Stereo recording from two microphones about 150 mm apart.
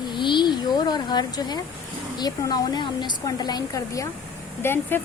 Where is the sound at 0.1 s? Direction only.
30° left (ahead or behind).